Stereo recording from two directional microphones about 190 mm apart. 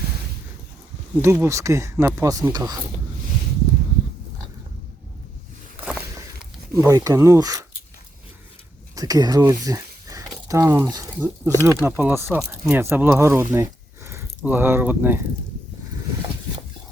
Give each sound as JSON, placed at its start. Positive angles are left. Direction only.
{"t": 1.2, "sound": "speech", "side_deg": -15}
{"t": 6.8, "sound": "speech", "side_deg": -15}
{"t": 9.0, "sound": "speech", "side_deg": -20}